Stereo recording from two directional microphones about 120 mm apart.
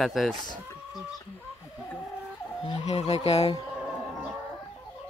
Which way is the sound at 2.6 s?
60° left (ahead or behind).